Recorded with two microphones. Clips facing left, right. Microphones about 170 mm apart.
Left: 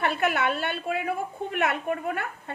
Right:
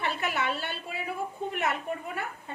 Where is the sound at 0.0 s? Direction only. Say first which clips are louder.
Left 5 dB; 55° left (ahead or behind).